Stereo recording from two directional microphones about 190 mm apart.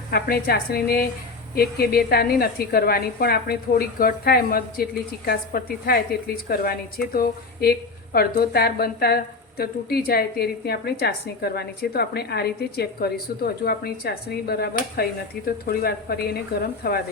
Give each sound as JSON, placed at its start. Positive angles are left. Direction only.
{"t": 0.1, "sound": "a woman's voice", "side_deg": 55}